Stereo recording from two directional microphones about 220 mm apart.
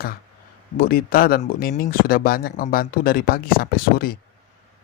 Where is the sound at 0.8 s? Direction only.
40° left (ahead or behind).